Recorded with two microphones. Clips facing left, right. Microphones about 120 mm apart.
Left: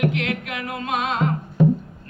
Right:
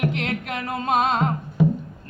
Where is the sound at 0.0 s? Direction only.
35° right (ahead or behind).